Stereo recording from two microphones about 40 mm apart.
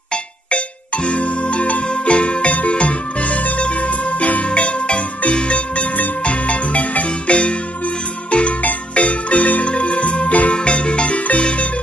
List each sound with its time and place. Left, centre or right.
0.1 s music: left
8.6 s marimba: left
10.5 s music: left